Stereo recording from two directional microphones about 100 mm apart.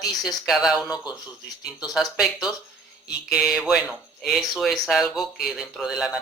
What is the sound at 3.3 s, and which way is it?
Speech, 5° right (ahead or behind).